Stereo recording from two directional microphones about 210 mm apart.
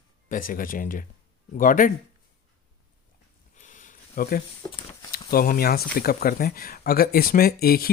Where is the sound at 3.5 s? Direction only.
35° left (ahead or behind).